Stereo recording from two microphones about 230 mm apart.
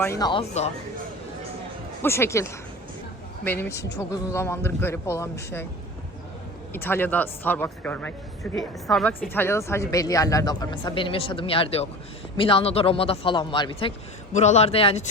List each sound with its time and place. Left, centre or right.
0.0 s a man's voice: centre
2.0 s a woman's voice: centre
6.7 s a woman's voice: centre; by 15.0 s left